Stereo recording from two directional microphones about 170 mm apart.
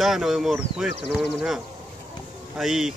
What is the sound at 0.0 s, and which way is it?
Speech, centre (ahead or behind).